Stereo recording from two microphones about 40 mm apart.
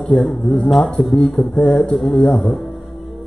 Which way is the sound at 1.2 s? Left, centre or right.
Left.